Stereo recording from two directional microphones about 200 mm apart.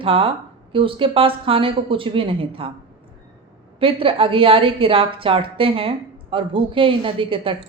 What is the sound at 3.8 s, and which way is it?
A woman's voice, 25° right (ahead or behind).